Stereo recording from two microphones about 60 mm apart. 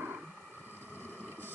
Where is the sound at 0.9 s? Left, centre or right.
Left.